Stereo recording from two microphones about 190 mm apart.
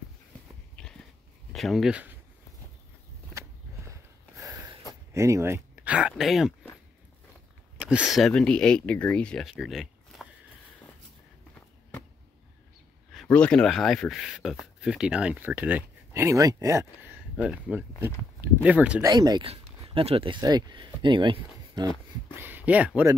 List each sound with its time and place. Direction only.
0.8 s dog: 5° left (ahead or behind)
1.5 s speech: centre (ahead or behind)
3.3 s a sound: 15° right (ahead or behind)
5.1 s speech: 15° right (ahead or behind)
7.7 s speech: 5° right (ahead or behind)
13.1 s speech: 5° left (ahead or behind)
19.0 s speech: 20° right (ahead or behind)
22.3 s speech: 10° right (ahead or behind)